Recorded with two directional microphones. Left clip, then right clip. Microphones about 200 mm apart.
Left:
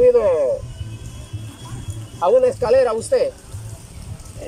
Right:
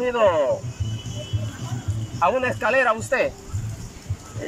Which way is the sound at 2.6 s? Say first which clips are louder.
Left 4 dB; 15° left (ahead or behind).